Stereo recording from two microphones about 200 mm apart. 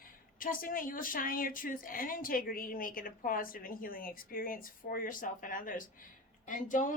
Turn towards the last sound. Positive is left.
turn(degrees=40)  # may be behind; listen again after turning